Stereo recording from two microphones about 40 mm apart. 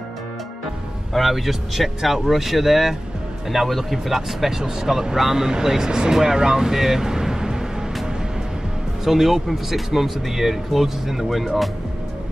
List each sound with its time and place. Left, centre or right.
1.1 s speech: centre
9.0 s speech: centre